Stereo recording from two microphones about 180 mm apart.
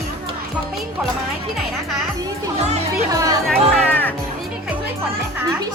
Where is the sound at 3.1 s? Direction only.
20° right (ahead or behind).